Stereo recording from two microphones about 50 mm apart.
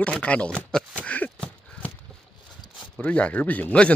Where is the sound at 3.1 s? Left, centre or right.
Left.